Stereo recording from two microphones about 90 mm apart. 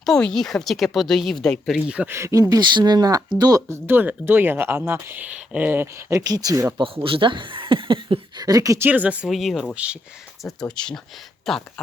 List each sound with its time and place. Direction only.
0.0 s speech: 5° left (ahead or behind)
2.0 s speech: 30° right (ahead or behind)
2.6 s speech: 55° right (ahead or behind)
3.7 s speech: 25° right (ahead or behind)
6.1 s speech: 40° right (ahead or behind)
6.7 s speech: 80° right
8.4 s speech: 45° right (ahead or behind)
8.8 s speech: 20° right (ahead or behind)
9.2 s speech: centre (ahead or behind)
9.7 s speech: 15° right (ahead or behind)
10.4 s speech: 10° left (ahead or behind)